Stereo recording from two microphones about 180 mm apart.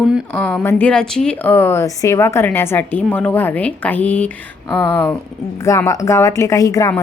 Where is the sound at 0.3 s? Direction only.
10° left (ahead or behind).